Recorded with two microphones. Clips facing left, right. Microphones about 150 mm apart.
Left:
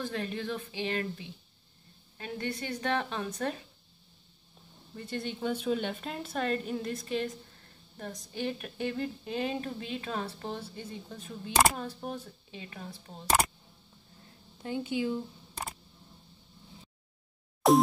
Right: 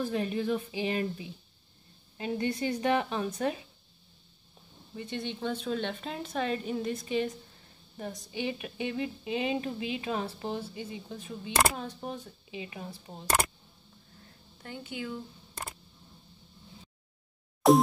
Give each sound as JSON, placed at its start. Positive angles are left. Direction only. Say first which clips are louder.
{"t": 0.0, "sound": "a woman's voice", "louder": "right 4 dB", "side_deg": -10}
{"t": 2.1, "sound": "a woman's voice", "louder": "right 5 dB", "side_deg": -20}
{"t": 4.9, "sound": "a woman's voice", "louder": "even", "side_deg": 5}
{"t": 14.6, "sound": "speech", "louder": "left 7 dB", "side_deg": 20}
{"t": 17.6, "sound": "a woman's voice", "louder": "right 2 dB", "side_deg": 0}